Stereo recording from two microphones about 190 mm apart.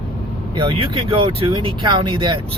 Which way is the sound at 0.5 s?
25° right (ahead or behind).